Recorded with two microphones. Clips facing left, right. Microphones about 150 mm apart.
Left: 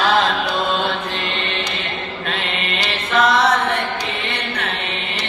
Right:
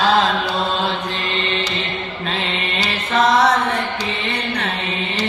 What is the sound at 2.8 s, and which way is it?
Mantra, 35° right (ahead or behind).